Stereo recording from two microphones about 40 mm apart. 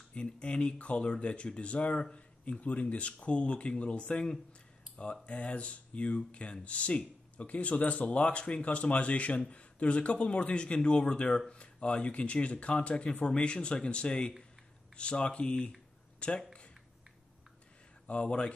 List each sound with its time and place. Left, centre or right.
0.1 s speech: left
5.2 s speech: left
18.0 s speech: left